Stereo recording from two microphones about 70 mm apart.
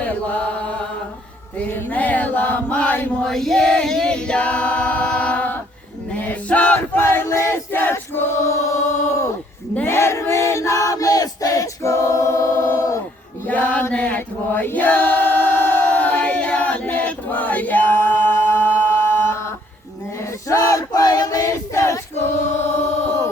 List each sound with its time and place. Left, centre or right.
0.0 s chant: left
3.2 s singing: centre
6.1 s male singing: centre
6.7 s choir: left
9.8 s battle cry: left
13.5 s a sound: left
13.9 s mantra: centre
14.2 s choir: left
20.5 s choir: left
22.5 s chant: left